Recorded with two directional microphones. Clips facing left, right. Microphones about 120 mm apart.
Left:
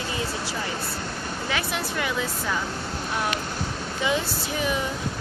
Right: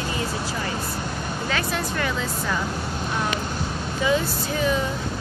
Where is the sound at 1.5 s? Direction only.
15° left (ahead or behind).